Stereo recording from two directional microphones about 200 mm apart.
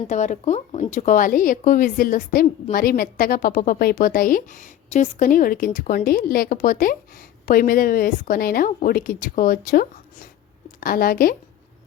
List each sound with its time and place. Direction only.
0.1 s a woman's voice: 35° left (ahead or behind)